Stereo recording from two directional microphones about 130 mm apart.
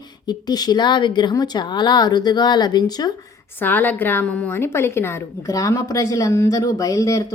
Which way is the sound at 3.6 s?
15° left (ahead or behind).